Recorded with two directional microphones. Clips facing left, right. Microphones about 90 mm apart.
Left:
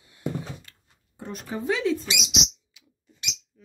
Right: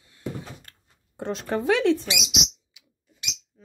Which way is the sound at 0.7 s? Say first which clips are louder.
Right 1 dB; 70° right (ahead or behind).